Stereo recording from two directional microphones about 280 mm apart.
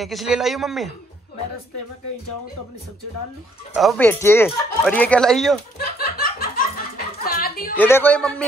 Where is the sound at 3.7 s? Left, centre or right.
Centre.